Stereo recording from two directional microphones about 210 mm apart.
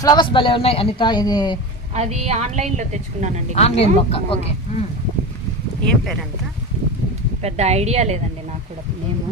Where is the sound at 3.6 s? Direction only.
30° left (ahead or behind).